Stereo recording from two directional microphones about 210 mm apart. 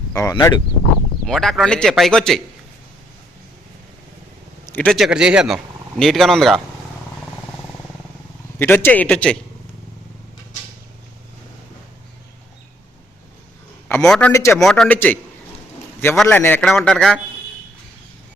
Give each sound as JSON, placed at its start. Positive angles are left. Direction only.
{"t": 0.1, "sound": "a man's voice", "side_deg": 15}
{"t": 1.3, "sound": "a man's voice", "side_deg": 0}
{"t": 4.6, "sound": "a man's voice", "side_deg": 10}
{"t": 8.5, "sound": "a man's voice", "side_deg": 10}
{"t": 13.8, "sound": "a man's voice", "side_deg": 5}